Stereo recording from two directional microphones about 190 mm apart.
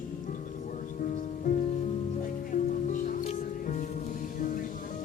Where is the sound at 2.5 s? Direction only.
45° left (ahead or behind).